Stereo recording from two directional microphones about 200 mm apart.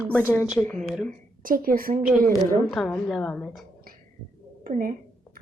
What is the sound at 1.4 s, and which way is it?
Speech, 45° right (ahead or behind).